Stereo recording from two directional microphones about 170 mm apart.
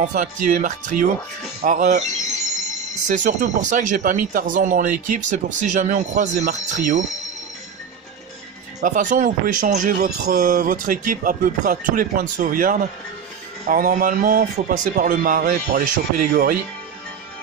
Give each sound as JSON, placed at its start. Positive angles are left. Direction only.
{"t": 0.0, "sound": "speech", "side_deg": -50}
{"t": 3.1, "sound": "speech", "side_deg": -50}
{"t": 8.8, "sound": "a man's voice", "side_deg": -50}